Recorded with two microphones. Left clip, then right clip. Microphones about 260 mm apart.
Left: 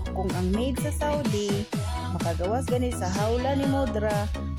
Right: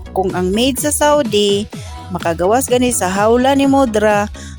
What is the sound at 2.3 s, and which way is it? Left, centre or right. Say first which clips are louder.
A woman's voice: right 15 dB; right.